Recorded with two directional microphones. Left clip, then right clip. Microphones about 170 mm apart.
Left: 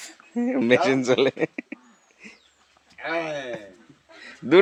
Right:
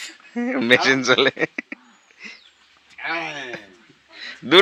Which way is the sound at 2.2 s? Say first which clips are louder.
Right 8 dB; 10° left (ahead or behind).